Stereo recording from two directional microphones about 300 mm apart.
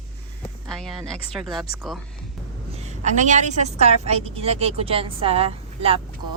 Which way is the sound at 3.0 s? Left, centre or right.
Right.